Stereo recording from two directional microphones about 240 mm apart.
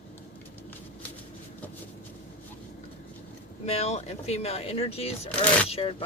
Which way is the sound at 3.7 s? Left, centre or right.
Left.